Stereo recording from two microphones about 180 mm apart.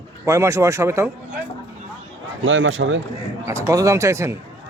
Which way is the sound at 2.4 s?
90° right.